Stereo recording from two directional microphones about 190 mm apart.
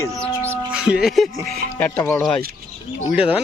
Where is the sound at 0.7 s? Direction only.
5° right (ahead or behind).